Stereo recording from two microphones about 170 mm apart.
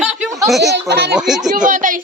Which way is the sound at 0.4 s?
Centre (ahead or behind).